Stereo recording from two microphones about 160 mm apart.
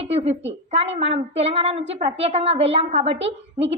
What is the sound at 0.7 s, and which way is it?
A woman's voice, 40° right (ahead or behind).